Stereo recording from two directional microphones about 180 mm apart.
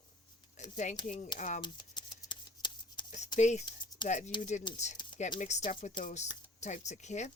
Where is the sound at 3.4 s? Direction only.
40° left (ahead or behind).